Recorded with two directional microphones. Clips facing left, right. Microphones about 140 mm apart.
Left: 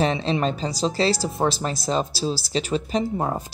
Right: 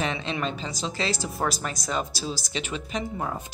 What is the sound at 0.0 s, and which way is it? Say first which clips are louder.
Speech: left 7 dB; 35° left (ahead or behind).